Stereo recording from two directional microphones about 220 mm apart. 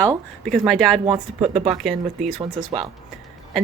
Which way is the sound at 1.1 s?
30° right (ahead or behind).